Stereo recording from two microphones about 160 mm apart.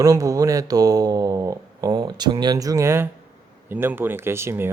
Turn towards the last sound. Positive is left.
turn(degrees=-15)  # may be behind; listen again after turning